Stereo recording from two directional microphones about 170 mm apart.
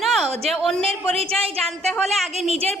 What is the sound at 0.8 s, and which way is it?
Speech, 35° right (ahead or behind).